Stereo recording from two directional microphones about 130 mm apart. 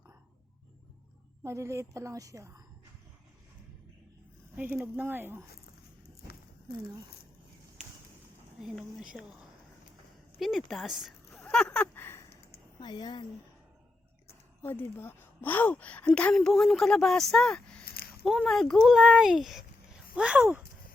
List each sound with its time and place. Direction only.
1.5 s a woman's voice: 25° right (ahead or behind)
4.5 s speech: 15° right (ahead or behind)
8.6 s speech: centre (ahead or behind)
10.7 s a sound: centre (ahead or behind); by 12.2 s 15° left (ahead or behind)
12.8 s speech: 35° left (ahead or behind)
14.6 s speech: 15° left (ahead or behind); by 20.7 s 10° right (ahead or behind)